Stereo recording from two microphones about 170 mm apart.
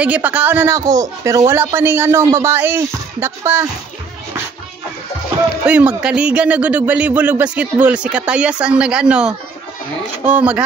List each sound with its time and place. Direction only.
0.0 s a man's voice: 10° right (ahead or behind)
5.7 s a man's voice: 5° right (ahead or behind)